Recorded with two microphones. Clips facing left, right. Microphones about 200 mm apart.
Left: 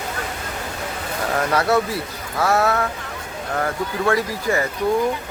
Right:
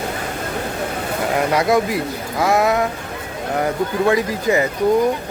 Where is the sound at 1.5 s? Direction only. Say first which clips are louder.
Right 2 dB; 15° right (ahead or behind).